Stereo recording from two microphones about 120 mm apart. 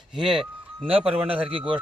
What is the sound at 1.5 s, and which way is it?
Speech, 45° right (ahead or behind).